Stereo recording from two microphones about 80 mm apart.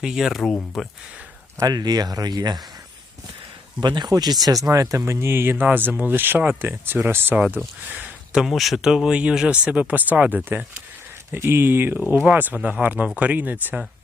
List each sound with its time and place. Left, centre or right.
0.0 s speech: centre
1.5 s speech: right
3.8 s speech: right
4.1 s speech: right
7.3 s speech: centre
7.9 s a sound: centre
8.4 s speech: centre; by 10.6 s right
11.3 s speech: right
12.6 s speech: centre